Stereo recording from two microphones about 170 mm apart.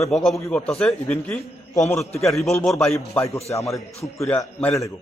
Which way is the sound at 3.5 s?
20° left (ahead or behind).